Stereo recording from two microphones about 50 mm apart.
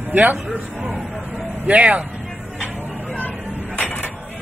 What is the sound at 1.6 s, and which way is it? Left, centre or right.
Speech, right.